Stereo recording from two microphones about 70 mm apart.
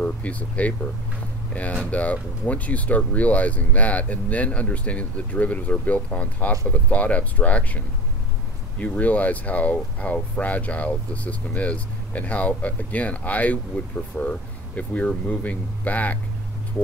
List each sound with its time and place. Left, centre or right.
0.0 s speech: left